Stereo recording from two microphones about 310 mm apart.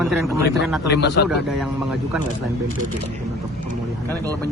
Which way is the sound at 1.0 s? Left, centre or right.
Left.